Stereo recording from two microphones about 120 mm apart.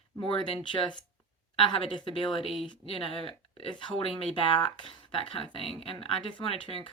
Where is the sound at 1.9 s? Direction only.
50° left (ahead or behind).